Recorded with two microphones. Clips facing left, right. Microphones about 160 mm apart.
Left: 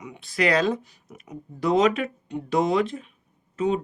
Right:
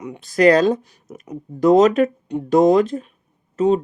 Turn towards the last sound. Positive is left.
turn(degrees=-40)  # may be behind; listen again after turning